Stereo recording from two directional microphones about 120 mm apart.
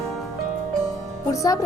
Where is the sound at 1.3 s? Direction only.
30° left (ahead or behind).